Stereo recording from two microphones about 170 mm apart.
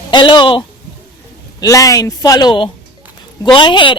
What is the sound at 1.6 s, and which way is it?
Speech, 20° left (ahead or behind).